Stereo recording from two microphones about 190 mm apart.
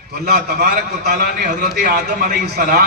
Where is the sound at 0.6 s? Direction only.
45° right (ahead or behind).